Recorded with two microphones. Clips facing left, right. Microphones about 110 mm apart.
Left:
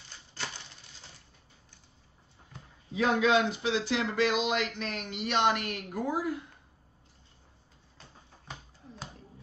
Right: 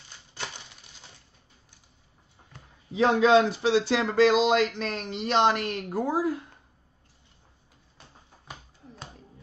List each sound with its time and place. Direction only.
2.9 s a man's voice: 30° right (ahead or behind)